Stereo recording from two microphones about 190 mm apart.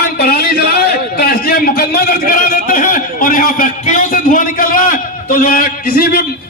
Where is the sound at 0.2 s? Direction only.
55° left (ahead or behind).